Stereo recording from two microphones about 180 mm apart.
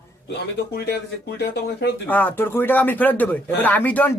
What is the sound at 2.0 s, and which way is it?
Speech, 10° left (ahead or behind).